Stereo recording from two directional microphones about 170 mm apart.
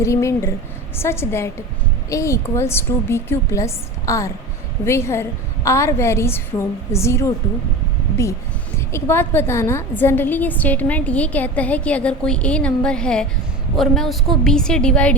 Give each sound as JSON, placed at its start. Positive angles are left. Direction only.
{"t": 0.0, "sound": "a woman's voice", "side_deg": 15}
{"t": 8.9, "sound": "a woman's voice", "side_deg": 15}